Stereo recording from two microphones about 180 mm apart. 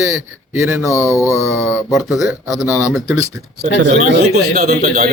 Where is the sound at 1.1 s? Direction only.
15° left (ahead or behind).